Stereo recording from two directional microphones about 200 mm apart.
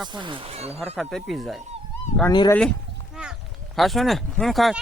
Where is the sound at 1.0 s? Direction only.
Centre (ahead or behind).